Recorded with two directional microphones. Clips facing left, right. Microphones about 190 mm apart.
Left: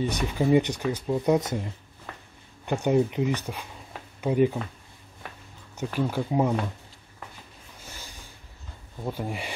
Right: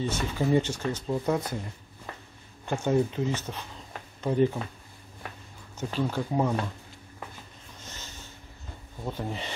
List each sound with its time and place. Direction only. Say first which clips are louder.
0.0 s speech: left 3 dB; 15° left (ahead or behind)
2.6 s speech: left 2 dB; 15° left (ahead or behind)
3.3 s a sound: left 1 dB; 10° left (ahead or behind)
5.9 s speech: left 2 dB; 10° left (ahead or behind)
7.8 s a sound: even; 10° left (ahead or behind)
9.0 s speech: left 2 dB; 10° left (ahead or behind)